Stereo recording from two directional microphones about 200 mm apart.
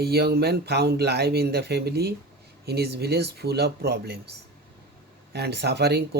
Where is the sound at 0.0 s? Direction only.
55° right (ahead or behind).